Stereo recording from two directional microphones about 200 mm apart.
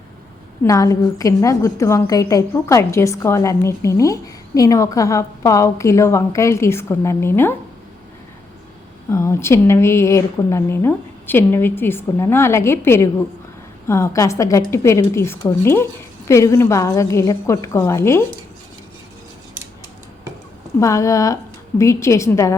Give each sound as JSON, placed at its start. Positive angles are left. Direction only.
{"t": 0.6, "sound": "a woman's voice", "side_deg": 15}
{"t": 9.0, "sound": "a woman's voice", "side_deg": 15}
{"t": 20.7, "sound": "a woman's voice", "side_deg": 15}